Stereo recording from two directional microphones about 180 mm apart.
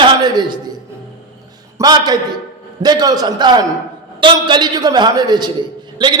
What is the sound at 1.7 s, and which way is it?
A man's voice, 20° right (ahead or behind).